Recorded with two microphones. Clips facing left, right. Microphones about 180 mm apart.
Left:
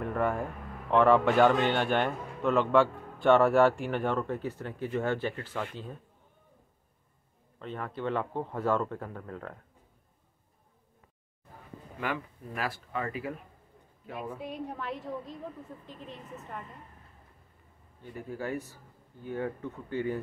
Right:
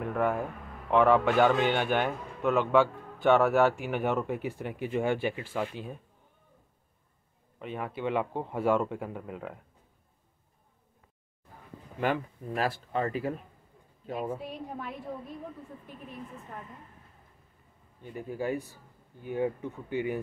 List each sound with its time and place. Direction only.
0.0 s a man's voice: centre (ahead or behind)
7.5 s speech: 10° right (ahead or behind)
12.0 s speech: 30° right (ahead or behind)
18.1 s speech: 15° right (ahead or behind)